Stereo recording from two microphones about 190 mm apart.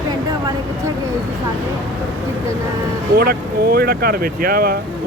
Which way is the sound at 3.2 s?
55° right (ahead or behind).